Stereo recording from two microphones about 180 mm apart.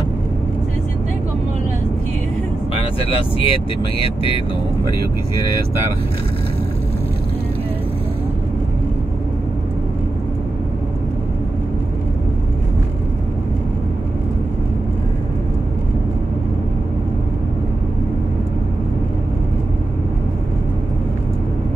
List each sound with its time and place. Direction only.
2.7 s speech: 30° left (ahead or behind)